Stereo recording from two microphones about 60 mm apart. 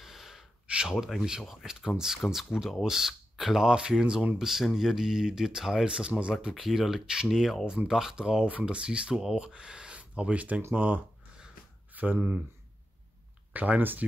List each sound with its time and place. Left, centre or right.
0.0 s gasp: centre
0.7 s a sound: centre
0.9 s speech: centre
4.4 s speech: centre
6.5 s speech: centre
7.6 s speech: centre; by 12.4 s right
13.5 s speech: right